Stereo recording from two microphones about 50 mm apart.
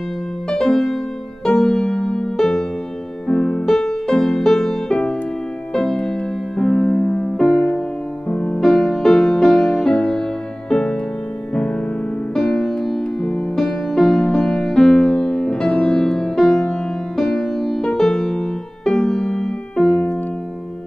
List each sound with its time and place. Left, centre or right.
0.5 s music: centre
8.3 s music: left
8.5 s music: centre